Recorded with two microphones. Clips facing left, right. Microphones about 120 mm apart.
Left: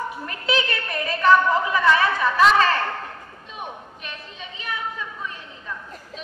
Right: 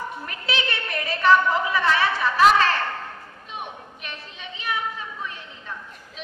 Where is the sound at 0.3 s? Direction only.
40° left (ahead or behind).